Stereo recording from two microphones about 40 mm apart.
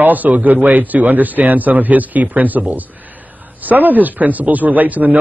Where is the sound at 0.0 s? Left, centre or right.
Right.